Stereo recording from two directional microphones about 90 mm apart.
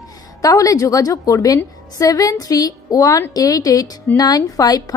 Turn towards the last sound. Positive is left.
turn(degrees=45)  # may be behind; listen again after turning